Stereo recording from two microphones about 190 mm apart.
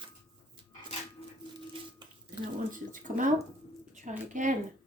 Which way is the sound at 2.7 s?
45° right (ahead or behind).